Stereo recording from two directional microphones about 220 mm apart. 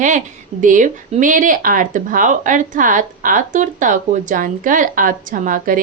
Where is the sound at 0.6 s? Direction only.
35° right (ahead or behind).